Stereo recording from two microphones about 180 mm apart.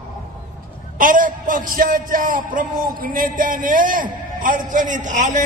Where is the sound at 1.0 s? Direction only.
50° right (ahead or behind).